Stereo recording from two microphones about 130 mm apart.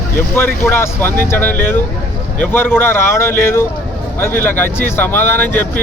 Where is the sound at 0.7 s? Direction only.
15° left (ahead or behind).